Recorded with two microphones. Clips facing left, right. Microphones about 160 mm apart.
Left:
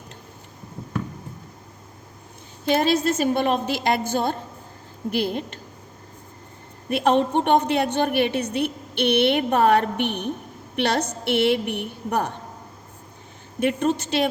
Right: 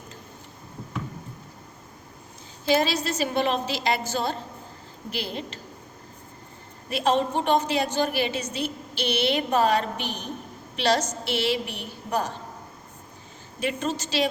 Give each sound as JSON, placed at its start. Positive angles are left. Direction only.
{"t": 2.7, "sound": "a woman's voice", "side_deg": 55}
{"t": 6.9, "sound": "a woman's voice", "side_deg": 60}
{"t": 13.6, "sound": "a woman's voice", "side_deg": 55}